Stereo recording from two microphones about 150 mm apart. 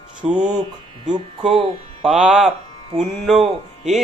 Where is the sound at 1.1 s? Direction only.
35° right (ahead or behind).